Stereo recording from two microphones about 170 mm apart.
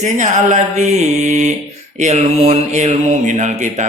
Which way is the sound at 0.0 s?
45° right (ahead or behind).